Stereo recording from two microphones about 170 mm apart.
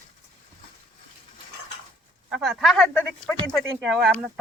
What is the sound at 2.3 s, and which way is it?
Speech, centre (ahead or behind).